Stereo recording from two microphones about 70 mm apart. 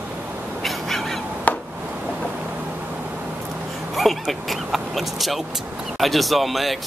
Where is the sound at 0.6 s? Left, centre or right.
Centre.